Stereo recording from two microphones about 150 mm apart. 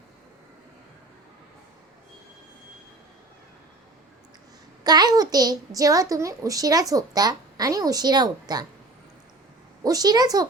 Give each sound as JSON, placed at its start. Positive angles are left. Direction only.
{"t": 4.8, "sound": "a child's voice", "side_deg": -25}
{"t": 9.8, "sound": "a child's voice", "side_deg": -25}